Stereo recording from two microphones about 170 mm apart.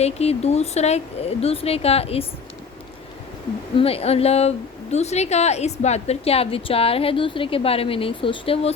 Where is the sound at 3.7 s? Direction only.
35° left (ahead or behind).